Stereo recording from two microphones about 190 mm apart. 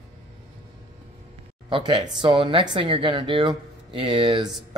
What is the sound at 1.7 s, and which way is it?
Speech, 20° right (ahead or behind).